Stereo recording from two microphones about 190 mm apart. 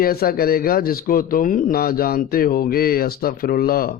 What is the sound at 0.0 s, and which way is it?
Speech, 50° left (ahead or behind).